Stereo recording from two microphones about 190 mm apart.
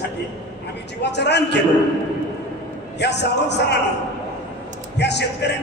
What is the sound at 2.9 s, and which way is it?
Speech, 65° left (ahead or behind).